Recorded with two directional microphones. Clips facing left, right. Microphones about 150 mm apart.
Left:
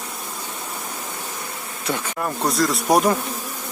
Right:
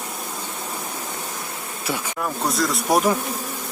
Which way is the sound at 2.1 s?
5° left (ahead or behind).